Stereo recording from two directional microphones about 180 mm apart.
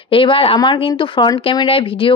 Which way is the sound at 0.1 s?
30° left (ahead or behind).